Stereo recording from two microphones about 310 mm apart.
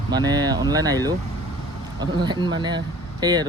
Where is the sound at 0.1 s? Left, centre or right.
Centre.